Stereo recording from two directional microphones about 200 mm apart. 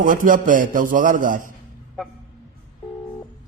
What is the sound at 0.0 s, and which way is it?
A man's voice, 45° right (ahead or behind).